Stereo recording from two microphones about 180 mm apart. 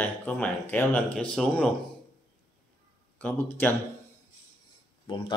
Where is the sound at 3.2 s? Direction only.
10° left (ahead or behind).